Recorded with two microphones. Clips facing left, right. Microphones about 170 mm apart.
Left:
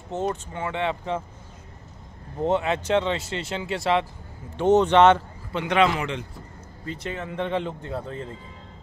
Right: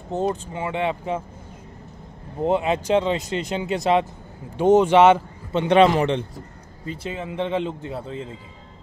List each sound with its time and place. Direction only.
0.3 s speech: 15° right (ahead or behind)
2.4 s speech: 10° right (ahead or behind)
5.5 s a man's voice: 25° right (ahead or behind)
6.9 s speech: 10° right (ahead or behind)